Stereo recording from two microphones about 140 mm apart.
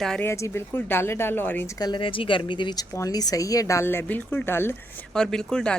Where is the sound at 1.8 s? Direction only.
30° left (ahead or behind); by 4.7 s 15° left (ahead or behind).